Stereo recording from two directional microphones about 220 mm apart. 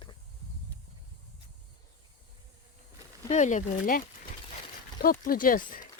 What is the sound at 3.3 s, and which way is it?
Speech, 35° left (ahead or behind).